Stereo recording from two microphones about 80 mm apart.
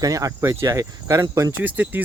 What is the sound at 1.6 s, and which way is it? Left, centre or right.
Speech, right.